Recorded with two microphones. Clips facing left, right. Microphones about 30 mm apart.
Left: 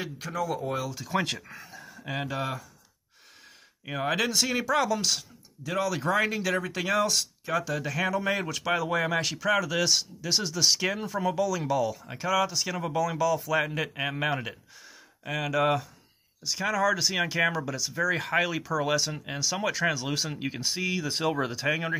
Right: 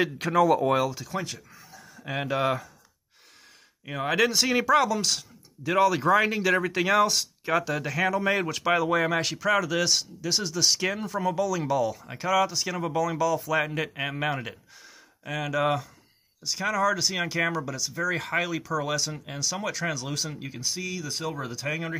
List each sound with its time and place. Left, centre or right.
0.2 s speech: right
1.2 s speech: left
1.7 s a sound: centre
2.4 s speech: right
3.8 s speech: centre
4.1 s speech: centre
4.8 s speech: centre
5.6 s speech: centre
5.9 s speech: centre
7.4 s speech: right
7.7 s speech: centre
20.3 s speech: left
21.5 s speech: left